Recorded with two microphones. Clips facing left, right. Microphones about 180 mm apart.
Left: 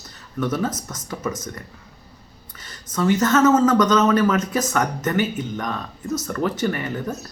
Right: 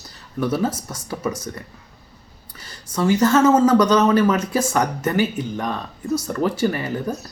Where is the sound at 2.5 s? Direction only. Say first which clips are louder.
Right 1 dB; 30° right (ahead or behind).